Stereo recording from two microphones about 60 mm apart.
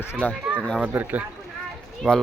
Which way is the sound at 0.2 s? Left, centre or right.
Left.